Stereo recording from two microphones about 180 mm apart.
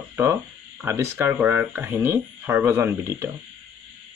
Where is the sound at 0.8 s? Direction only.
15° right (ahead or behind).